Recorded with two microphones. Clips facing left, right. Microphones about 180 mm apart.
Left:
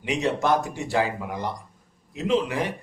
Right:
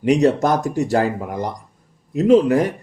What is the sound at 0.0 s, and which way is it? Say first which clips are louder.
A man's voice: right 9 dB; 40° right (ahead or behind).